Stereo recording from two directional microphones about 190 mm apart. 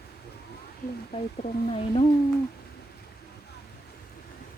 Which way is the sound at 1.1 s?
30° left (ahead or behind).